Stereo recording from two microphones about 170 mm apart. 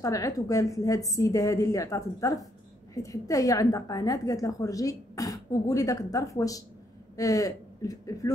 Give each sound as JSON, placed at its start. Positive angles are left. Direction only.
{"t": 0.0, "sound": "a woman's voice", "side_deg": 20}